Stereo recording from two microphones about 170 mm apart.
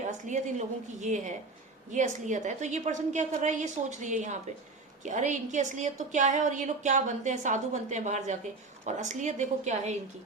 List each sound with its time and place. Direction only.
0.0 s a woman's voice: 45° right (ahead or behind)